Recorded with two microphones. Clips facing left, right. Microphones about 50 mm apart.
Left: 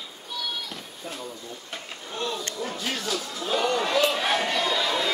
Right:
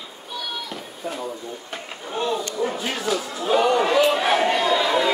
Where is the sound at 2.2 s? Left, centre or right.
Centre.